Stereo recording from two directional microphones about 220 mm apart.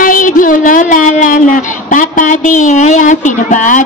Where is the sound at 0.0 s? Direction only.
40° left (ahead or behind).